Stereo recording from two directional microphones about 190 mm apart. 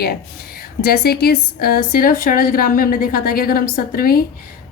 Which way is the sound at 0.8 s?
55° left (ahead or behind).